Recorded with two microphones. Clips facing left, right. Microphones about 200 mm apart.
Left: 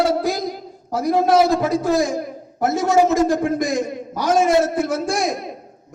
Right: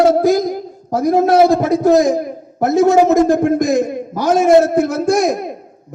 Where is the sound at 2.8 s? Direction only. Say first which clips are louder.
Right 6 dB; 65° right (ahead or behind).